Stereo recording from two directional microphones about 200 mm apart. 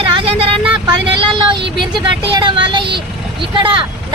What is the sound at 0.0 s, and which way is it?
Vehicle, 25° right (ahead or behind).